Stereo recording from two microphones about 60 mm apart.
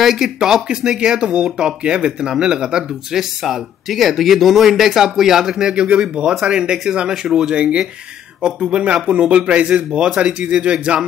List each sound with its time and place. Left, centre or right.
0.0 s speech: centre